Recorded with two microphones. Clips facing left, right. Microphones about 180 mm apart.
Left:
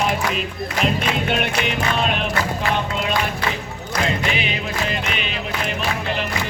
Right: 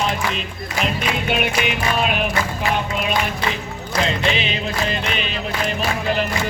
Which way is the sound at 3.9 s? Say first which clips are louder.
Right 2 dB; 30° right (ahead or behind).